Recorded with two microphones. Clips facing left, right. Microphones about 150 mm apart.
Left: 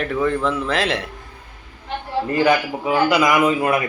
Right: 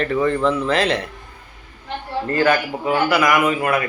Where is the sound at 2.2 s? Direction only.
15° left (ahead or behind).